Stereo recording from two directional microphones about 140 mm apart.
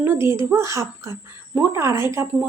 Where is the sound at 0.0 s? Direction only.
15° right (ahead or behind).